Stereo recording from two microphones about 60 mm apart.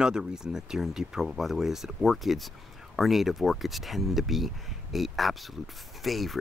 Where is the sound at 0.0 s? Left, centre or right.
Centre.